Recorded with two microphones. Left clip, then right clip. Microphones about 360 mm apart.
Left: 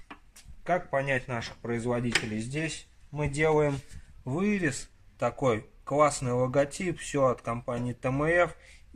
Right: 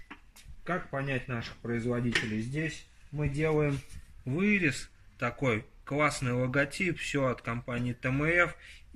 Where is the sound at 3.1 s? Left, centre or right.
Left.